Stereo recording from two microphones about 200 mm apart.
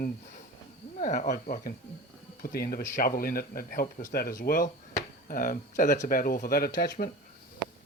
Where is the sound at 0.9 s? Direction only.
35° left (ahead or behind).